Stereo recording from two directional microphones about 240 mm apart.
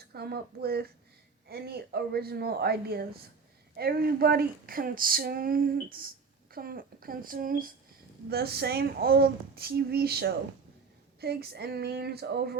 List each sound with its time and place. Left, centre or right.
0.0 s speech: right